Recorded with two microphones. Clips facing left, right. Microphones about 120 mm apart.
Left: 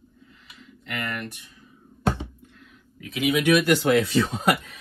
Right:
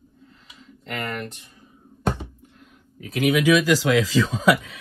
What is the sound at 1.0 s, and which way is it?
Speech, 25° right (ahead or behind).